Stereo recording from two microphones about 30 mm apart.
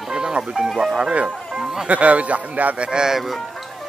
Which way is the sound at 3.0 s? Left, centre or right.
Centre.